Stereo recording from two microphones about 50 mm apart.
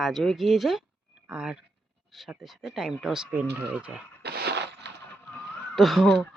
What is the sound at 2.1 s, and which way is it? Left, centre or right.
Speech, centre.